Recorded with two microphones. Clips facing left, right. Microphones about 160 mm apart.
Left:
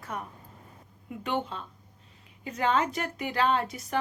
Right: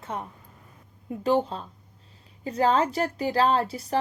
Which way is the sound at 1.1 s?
35° right (ahead or behind).